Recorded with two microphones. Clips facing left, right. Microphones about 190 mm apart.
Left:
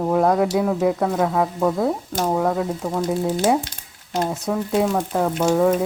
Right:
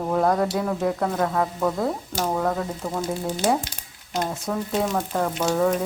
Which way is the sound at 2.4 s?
10° left (ahead or behind).